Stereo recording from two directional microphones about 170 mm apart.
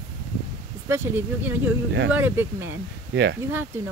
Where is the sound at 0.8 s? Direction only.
15° right (ahead or behind).